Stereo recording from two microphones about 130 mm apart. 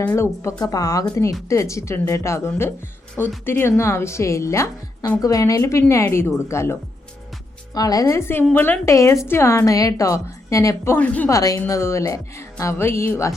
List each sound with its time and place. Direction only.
0.0 s speech: 15° left (ahead or behind)
0.6 s a woman's voice: 30° left (ahead or behind); by 11.3 s 10° left (ahead or behind)
11.3 s a woman's voice: 25° left (ahead or behind)